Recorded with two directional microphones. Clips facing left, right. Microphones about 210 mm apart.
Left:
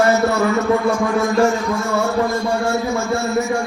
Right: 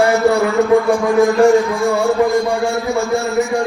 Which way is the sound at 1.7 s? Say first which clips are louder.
Right 4 dB; 15° right (ahead or behind).